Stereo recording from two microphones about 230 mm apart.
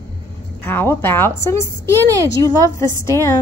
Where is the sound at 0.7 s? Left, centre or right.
Centre.